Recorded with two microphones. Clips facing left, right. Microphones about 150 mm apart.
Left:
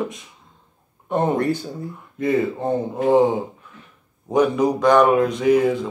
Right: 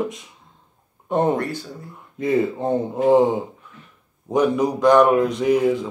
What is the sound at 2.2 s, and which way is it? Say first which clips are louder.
Speech: even; centre (ahead or behind).